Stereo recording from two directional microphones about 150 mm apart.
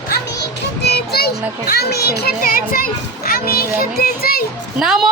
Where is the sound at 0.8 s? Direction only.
90° left.